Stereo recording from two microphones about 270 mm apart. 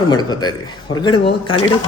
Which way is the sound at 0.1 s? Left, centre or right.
Centre.